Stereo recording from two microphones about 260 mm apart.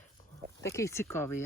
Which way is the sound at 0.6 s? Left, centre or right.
Centre.